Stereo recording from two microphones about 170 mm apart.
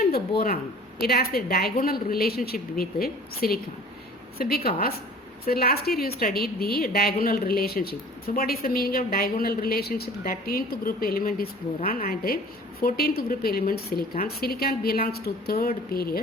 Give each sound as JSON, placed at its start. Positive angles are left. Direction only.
{"t": 0.1, "sound": "speech", "side_deg": 65}